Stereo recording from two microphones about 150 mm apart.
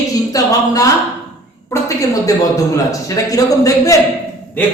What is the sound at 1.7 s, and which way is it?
A man's voice, 25° left (ahead or behind).